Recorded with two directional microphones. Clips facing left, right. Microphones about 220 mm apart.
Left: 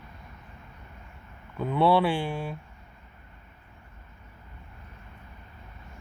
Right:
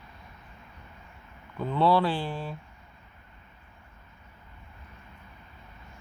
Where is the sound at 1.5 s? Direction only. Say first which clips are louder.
Left 1 dB; 10° left (ahead or behind).